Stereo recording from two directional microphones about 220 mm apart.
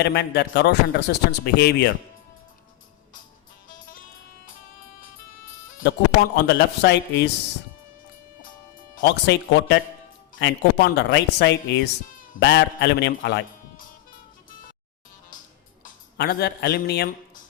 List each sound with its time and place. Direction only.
0.0 s a man's voice: 50° left (ahead or behind)
6.3 s a man's voice: 50° left (ahead or behind)
9.0 s a man's voice: 50° left (ahead or behind)
15.8 s speech: 45° left (ahead or behind)